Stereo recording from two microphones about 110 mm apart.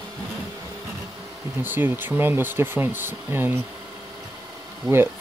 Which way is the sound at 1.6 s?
20° right (ahead or behind).